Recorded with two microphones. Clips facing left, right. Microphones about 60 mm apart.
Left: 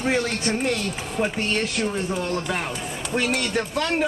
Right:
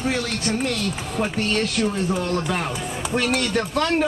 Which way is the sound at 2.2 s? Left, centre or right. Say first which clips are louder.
Right 2 dB; centre.